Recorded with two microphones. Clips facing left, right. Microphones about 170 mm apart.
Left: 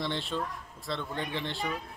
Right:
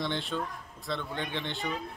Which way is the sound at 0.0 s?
Centre (ahead or behind).